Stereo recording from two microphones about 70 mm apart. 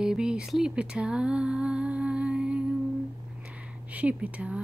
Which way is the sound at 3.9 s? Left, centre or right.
Centre.